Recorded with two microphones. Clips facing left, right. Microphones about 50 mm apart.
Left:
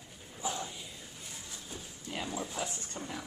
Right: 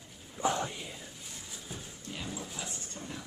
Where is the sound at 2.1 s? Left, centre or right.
Left.